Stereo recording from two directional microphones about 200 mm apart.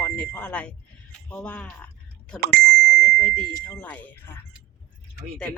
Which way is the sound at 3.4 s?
5° left (ahead or behind).